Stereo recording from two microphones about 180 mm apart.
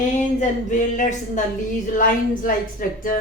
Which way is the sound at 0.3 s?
45° left (ahead or behind).